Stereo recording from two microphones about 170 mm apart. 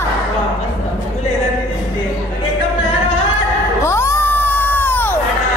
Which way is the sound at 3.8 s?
15° left (ahead or behind).